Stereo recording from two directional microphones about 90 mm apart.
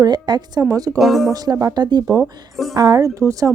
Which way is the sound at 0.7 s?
40° right (ahead or behind).